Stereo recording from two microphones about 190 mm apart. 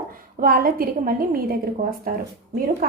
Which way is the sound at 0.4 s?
50° right (ahead or behind).